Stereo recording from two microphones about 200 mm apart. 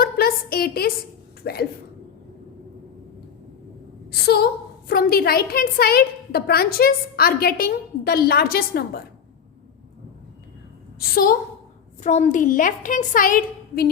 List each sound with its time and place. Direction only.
0.0 s a woman's voice: 50° left (ahead or behind)
4.1 s a woman's voice: 50° left (ahead or behind)
11.1 s a woman's voice: 45° left (ahead or behind)
12.0 s a woman's voice: 35° left (ahead or behind)